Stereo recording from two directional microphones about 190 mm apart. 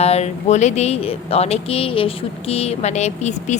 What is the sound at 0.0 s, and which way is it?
Speech, 35° left (ahead or behind).